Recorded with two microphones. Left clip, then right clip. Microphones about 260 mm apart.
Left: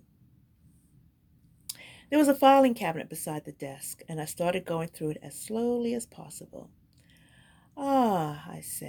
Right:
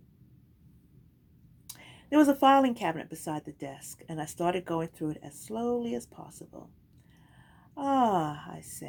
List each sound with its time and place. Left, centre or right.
1.7 s a sound: left
2.4 s speech: left
7.8 s speech: left